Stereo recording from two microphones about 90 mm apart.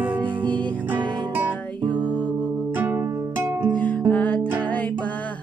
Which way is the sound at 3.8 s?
15° left (ahead or behind).